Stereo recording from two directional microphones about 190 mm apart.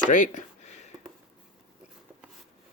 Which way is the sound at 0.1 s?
40° left (ahead or behind).